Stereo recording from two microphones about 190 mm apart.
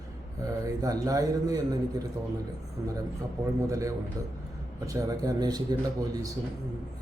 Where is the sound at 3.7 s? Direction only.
15° right (ahead or behind).